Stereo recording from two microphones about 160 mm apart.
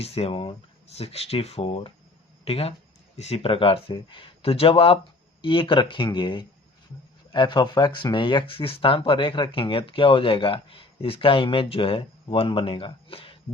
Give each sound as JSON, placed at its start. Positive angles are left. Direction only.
{"t": 0.0, "sound": "speech", "side_deg": 40}